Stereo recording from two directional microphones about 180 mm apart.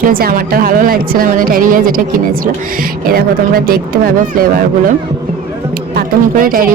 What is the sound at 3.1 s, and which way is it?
A woman's voice, 55° right (ahead or behind).